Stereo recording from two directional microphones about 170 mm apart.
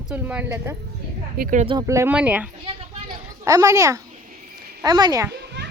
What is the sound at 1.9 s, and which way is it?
Speech, 15° right (ahead or behind).